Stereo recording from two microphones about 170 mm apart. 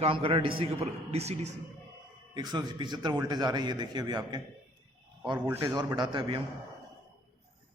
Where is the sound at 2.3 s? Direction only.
25° right (ahead or behind).